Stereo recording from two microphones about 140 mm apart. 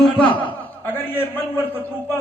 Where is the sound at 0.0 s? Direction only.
10° left (ahead or behind).